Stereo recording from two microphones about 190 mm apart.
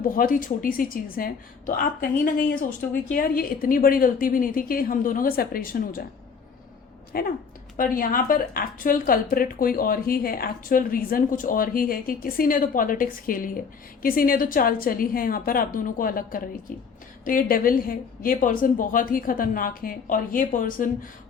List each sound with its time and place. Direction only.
0.0 s speech: 45° left (ahead or behind)
7.1 s speech: 50° left (ahead or behind)